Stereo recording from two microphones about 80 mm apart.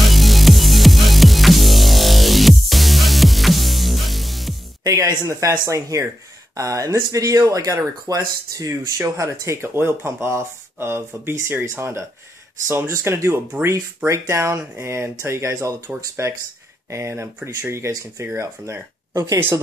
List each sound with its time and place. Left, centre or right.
0.0 s music: centre
4.8 s speech: right
13.7 s speech: right